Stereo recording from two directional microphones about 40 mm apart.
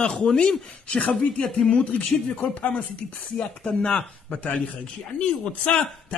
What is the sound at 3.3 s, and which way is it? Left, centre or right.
Speech, left.